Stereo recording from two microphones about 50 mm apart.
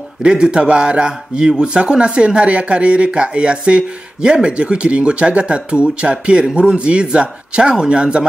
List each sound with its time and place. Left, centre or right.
0.2 s a man's voice: centre